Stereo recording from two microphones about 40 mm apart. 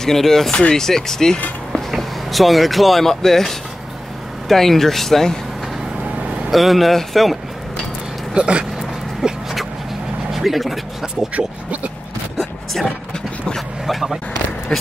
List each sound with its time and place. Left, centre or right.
0.0 s speech: centre
0.5 s speech: left
1.7 s speech: centre
6.5 s speech: centre
8.4 s speech: right
9.2 s dog: centre
10.3 s speech: centre
11.3 s speech: right
13.6 s vehicle: centre
14.7 s speech: left